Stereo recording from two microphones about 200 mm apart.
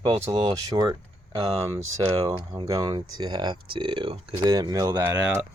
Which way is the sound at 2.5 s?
20° right (ahead or behind).